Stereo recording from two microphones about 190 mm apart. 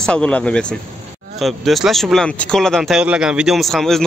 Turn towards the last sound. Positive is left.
turn(degrees=0)  # may be behind; listen again after turning